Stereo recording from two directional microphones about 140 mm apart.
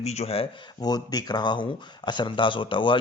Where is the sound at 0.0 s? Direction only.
50° left (ahead or behind).